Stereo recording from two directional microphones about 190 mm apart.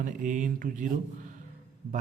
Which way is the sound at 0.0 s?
40° right (ahead or behind).